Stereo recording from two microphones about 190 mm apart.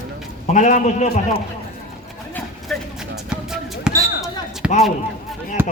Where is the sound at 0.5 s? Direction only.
40° left (ahead or behind).